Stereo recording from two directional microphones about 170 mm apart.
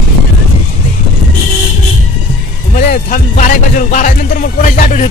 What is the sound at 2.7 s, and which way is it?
Music, 60° left (ahead or behind).